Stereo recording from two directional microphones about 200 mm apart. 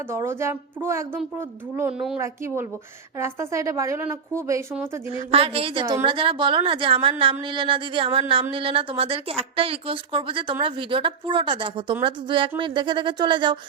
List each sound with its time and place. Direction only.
0.1 s a woman's voice: 15° right (ahead or behind)
2.2 s a woman's voice: 15° right (ahead or behind)
5.3 s a woman's voice: 30° right (ahead or behind)